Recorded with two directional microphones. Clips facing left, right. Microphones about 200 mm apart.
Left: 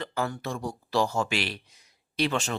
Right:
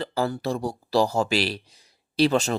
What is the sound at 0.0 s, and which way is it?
Speech, 35° right (ahead or behind).